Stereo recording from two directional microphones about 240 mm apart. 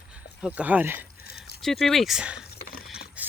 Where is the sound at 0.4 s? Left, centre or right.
Centre.